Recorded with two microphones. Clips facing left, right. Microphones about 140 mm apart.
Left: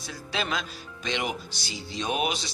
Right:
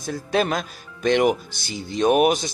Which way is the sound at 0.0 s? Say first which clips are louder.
Right 10 dB; 50° right (ahead or behind).